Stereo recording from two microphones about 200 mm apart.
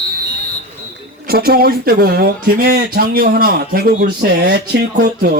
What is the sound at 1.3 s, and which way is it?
Speech, 50° right (ahead or behind).